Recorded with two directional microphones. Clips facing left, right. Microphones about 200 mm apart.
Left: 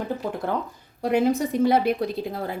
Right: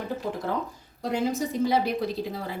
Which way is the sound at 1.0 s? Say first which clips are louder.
Left 6 dB; 60° left (ahead or behind).